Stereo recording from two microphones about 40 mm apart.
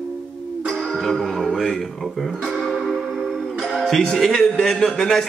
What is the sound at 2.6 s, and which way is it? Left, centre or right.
Music, centre.